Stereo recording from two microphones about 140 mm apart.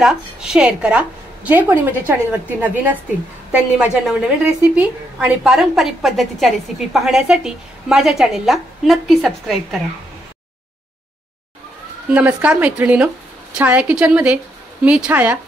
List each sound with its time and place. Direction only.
0.0 s a woman's voice: 5° right (ahead or behind)
12.1 s a woman's voice: 10° right (ahead or behind)